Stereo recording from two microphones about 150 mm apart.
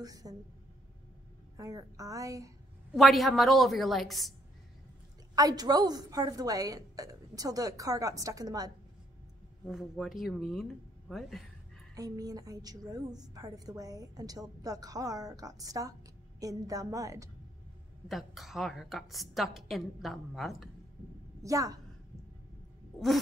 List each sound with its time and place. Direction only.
0.0 s a woman's voice: 25° right (ahead or behind)
1.6 s a woman's voice: 25° right (ahead or behind)
3.0 s a woman's voice: centre (ahead or behind)
5.3 s a woman's voice: 25° right (ahead or behind)
9.7 s a woman's voice: centre (ahead or behind)
11.9 s a woman's voice: 25° right (ahead or behind)
18.0 s a woman's voice: centre (ahead or behind)
21.4 s a woman's voice: 20° right (ahead or behind)